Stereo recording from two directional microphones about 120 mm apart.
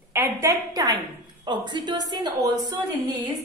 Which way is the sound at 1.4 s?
40° right (ahead or behind).